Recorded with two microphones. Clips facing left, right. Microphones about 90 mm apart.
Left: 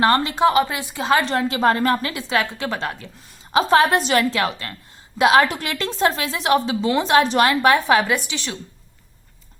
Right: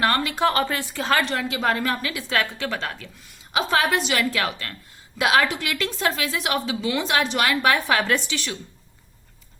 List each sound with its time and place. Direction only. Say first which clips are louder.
0.0 s a woman's voice: left 5 dB; 25° left (ahead or behind)
1.2 s a woman's voice: left 5 dB; 35° left (ahead or behind)
2.3 s a woman's voice: left 3 dB; 20° left (ahead or behind)
3.5 s a woman's voice: left 6 dB; 35° left (ahead or behind)